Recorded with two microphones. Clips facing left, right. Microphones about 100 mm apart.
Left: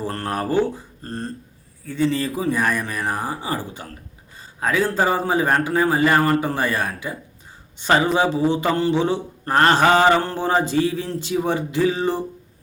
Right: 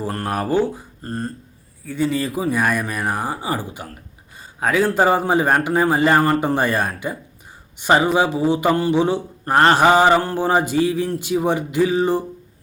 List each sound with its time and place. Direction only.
0.0 s mantra: 15° right (ahead or behind)
4.6 s a man's voice: 20° right (ahead or behind)
7.8 s mantra: 15° right (ahead or behind)